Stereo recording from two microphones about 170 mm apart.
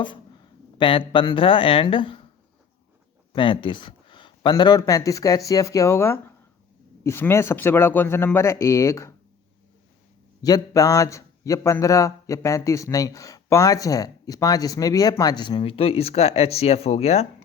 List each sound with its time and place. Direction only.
0.8 s speech: 30° left (ahead or behind)
3.3 s speech: 30° left (ahead or behind)
10.4 s a man's voice: 20° left (ahead or behind); by 17.2 s 40° left (ahead or behind)